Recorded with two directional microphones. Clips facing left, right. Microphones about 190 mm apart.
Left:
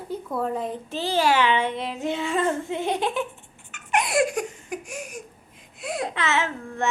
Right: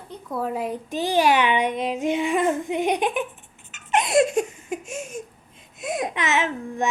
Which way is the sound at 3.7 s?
20° right (ahead or behind).